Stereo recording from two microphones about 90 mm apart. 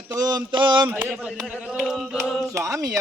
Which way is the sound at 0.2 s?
50° right (ahead or behind).